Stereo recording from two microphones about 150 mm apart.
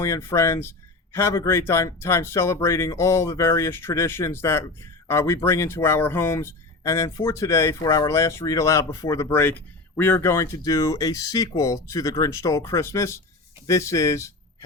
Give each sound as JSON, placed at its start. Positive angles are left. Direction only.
{"t": 0.0, "sound": "speech", "side_deg": 15}